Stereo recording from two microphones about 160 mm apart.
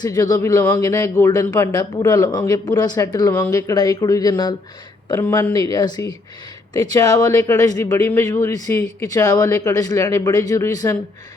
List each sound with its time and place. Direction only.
0.0 s speech: 20° left (ahead or behind)